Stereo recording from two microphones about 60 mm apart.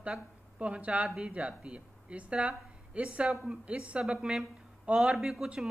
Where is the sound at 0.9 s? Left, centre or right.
Centre.